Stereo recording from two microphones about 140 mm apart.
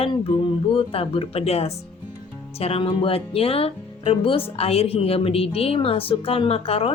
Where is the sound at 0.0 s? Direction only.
40° left (ahead or behind).